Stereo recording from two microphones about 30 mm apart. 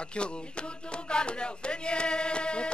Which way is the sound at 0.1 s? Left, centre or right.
Left.